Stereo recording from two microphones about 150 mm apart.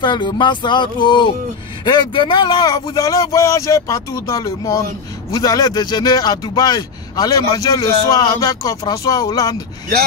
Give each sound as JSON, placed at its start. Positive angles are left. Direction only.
{"t": 0.0, "sound": "speech", "side_deg": 30}